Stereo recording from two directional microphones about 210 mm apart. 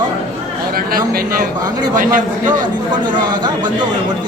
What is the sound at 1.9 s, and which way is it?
Speech, 40° right (ahead or behind).